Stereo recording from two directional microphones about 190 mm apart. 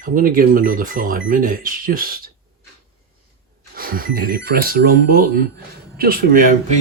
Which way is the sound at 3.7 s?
50° right (ahead or behind).